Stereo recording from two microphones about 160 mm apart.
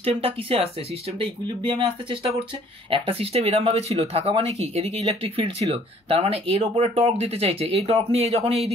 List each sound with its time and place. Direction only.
0.0 s speech: 35° right (ahead or behind)